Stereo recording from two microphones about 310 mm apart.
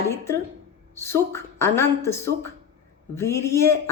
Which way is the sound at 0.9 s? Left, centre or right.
Centre.